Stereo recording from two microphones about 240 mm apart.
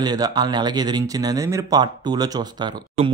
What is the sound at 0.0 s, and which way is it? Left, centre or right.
Speech, centre.